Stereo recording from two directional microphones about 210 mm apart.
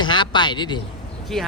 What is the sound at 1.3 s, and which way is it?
Speech, centre (ahead or behind).